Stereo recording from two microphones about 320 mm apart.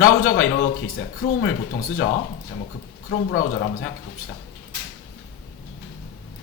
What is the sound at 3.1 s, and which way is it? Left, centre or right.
Speech, left.